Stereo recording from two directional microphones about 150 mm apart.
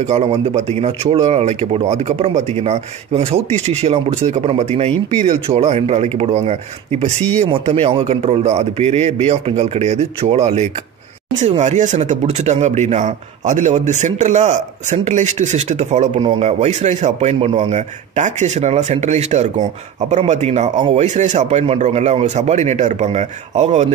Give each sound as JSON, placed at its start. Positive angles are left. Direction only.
{"t": 0.1, "sound": "a man's voice", "side_deg": -45}
{"t": 16.2, "sound": "speech", "side_deg": -35}
{"t": 16.4, "sound": "a man's voice", "side_deg": -50}
{"t": 20.7, "sound": "speech", "side_deg": -35}
{"t": 21.0, "sound": "a man's voice", "side_deg": -50}